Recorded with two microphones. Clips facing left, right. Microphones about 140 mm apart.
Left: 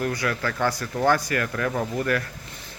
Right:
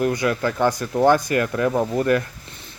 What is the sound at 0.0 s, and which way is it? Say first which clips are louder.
Speech: right 6 dB; 20° right (ahead or behind).